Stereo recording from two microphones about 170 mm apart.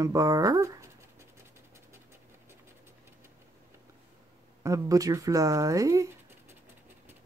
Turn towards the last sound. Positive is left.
turn(degrees=-20)  # may be behind; listen again after turning